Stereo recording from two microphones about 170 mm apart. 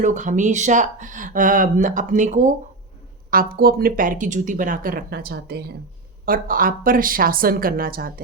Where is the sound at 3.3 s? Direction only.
60° right (ahead or behind).